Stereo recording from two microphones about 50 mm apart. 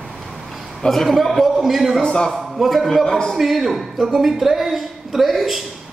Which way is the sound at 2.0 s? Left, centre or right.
Centre.